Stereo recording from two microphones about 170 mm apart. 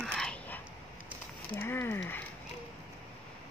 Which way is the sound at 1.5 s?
15° left (ahead or behind).